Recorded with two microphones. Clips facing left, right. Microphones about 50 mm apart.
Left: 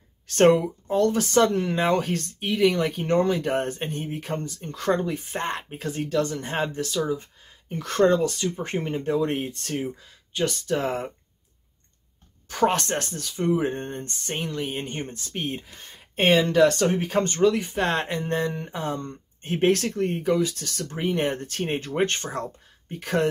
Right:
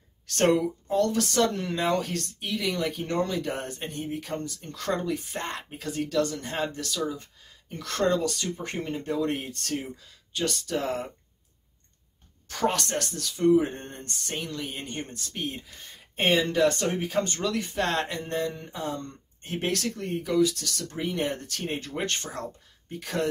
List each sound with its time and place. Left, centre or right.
0.4 s speech: left
12.4 s speech: left
16.2 s speech: left
16.5 s speech: left
17.2 s speech: left
17.6 s speech: centre; by 23.2 s left